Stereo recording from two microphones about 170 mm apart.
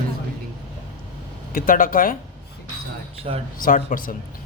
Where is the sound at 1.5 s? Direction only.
55° left (ahead or behind).